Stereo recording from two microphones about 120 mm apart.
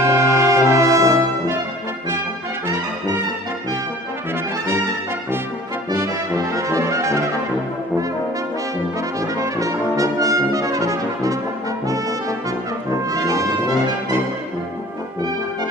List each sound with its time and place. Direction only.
0.0 s brass instrument: 20° right (ahead or behind)
5.9 s brass instrument: 25° right (ahead or behind)
9.2 s brass instrument: 30° right (ahead or behind)
13.1 s brass instrument: 30° right (ahead or behind)